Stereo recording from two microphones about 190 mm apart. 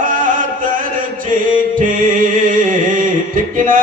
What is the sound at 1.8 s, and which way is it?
Music, 45° right (ahead or behind).